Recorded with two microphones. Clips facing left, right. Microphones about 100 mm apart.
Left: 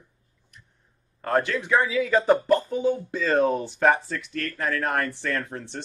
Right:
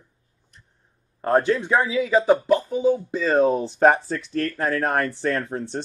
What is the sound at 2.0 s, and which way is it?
Speech, 10° right (ahead or behind).